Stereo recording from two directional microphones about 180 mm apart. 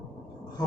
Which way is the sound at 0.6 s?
20° left (ahead or behind).